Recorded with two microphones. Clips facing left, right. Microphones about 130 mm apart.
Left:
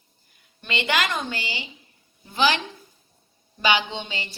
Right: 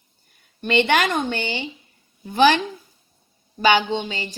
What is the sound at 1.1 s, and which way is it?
A woman's voice, 55° right (ahead or behind).